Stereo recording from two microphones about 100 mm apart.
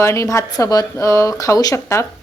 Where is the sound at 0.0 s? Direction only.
30° left (ahead or behind).